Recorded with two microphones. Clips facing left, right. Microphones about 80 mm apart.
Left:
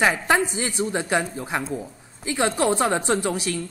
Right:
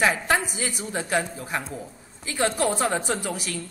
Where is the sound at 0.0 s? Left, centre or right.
Left.